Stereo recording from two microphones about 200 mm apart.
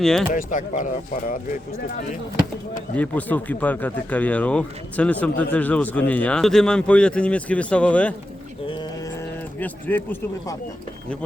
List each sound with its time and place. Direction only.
0.0 s speech: 5° left (ahead or behind)
0.3 s speech: 40° left (ahead or behind)
2.9 s a man's voice: 10° left (ahead or behind)
9.6 s a man's voice: 10° left (ahead or behind)